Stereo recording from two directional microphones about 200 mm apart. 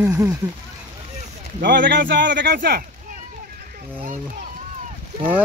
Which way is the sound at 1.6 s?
50° right (ahead or behind).